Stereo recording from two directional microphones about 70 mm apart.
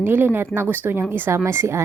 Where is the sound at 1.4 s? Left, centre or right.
Right.